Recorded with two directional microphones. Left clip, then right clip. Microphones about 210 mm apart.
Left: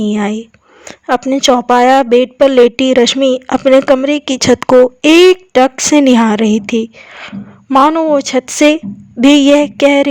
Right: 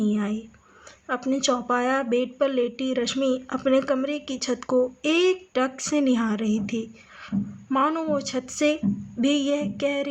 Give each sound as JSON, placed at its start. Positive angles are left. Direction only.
{"t": 0.0, "sound": "a woman's voice", "side_deg": 45}